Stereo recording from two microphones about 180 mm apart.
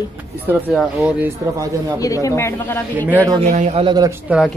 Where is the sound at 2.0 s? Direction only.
20° left (ahead or behind).